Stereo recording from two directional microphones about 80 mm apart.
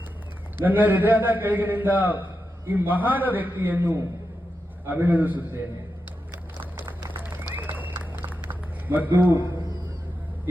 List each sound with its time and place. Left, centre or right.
0.5 s a man's voice: right
6.6 s run: right
7.5 s a sound: right